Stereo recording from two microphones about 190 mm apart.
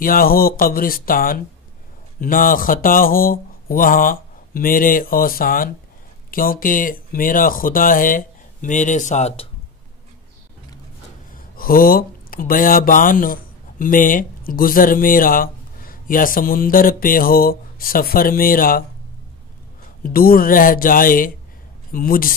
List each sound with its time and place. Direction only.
0.0 s speech: 50° left (ahead or behind)
11.3 s speech: 50° left (ahead or behind)
20.0 s speech: 50° left (ahead or behind)